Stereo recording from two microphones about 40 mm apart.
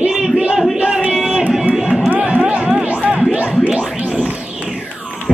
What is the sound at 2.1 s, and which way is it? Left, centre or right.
Music, right.